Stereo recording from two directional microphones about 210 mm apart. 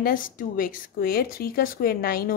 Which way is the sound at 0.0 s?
40° left (ahead or behind).